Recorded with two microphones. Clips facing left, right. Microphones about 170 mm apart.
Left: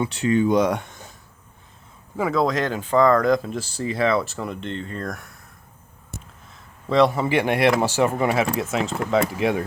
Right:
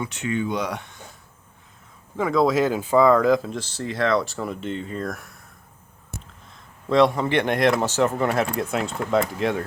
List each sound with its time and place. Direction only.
0.0 s speech: 35° left (ahead or behind)
2.1 s speech: 5° left (ahead or behind)
6.8 s speech: centre (ahead or behind)